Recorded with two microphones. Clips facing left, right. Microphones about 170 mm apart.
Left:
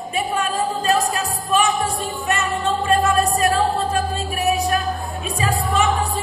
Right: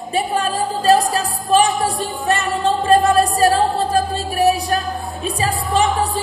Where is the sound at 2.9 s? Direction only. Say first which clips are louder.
Right 4 dB; 35° right (ahead or behind).